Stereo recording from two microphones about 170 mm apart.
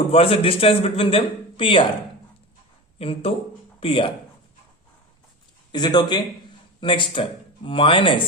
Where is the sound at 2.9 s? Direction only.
35° left (ahead or behind).